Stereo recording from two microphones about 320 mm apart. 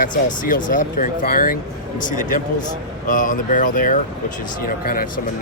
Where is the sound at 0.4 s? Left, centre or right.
Left.